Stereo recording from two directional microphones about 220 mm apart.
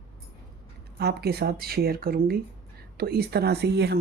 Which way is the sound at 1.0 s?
45° right (ahead or behind).